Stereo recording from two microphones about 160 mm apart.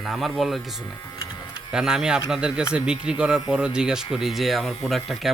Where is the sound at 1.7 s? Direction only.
5° right (ahead or behind).